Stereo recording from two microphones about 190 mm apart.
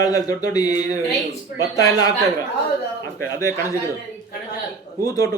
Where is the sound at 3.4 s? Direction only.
15° left (ahead or behind).